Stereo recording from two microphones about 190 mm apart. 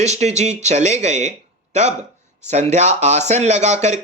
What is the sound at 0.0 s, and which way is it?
Speech, 35° right (ahead or behind).